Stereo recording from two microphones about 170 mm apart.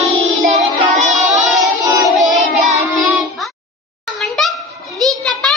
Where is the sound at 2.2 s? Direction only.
50° right (ahead or behind).